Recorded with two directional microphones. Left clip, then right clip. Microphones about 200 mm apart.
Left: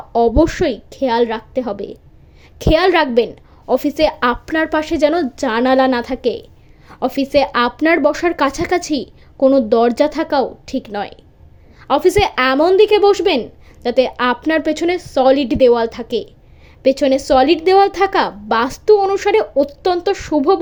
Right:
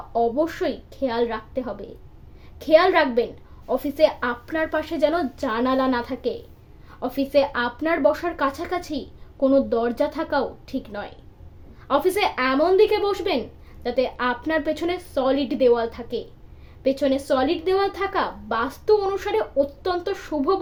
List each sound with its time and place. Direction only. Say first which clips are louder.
0.1 s speech: left 8 dB; 40° left (ahead or behind)